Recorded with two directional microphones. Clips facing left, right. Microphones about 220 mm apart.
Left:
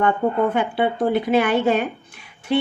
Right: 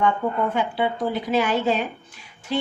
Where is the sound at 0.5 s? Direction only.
60° left (ahead or behind).